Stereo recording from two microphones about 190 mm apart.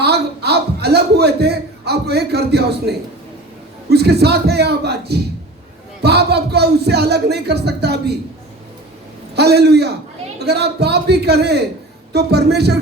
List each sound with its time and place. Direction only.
0.0 s a sound: 60° right (ahead or behind)
3.8 s speech: 60° right (ahead or behind)
9.3 s speech: 60° right (ahead or behind)